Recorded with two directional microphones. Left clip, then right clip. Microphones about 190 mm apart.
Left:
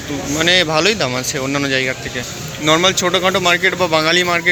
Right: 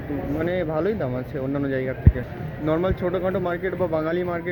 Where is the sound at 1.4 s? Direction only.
20° left (ahead or behind).